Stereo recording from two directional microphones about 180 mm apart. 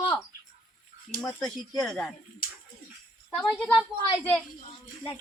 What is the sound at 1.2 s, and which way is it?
Speech, centre (ahead or behind).